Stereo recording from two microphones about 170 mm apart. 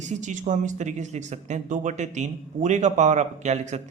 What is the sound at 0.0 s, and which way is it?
Speech, 45° right (ahead or behind).